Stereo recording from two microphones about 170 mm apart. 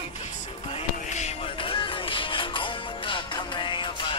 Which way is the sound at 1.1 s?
35° left (ahead or behind).